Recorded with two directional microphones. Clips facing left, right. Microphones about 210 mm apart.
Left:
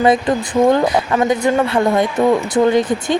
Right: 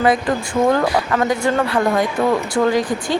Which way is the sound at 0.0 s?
25° left (ahead or behind).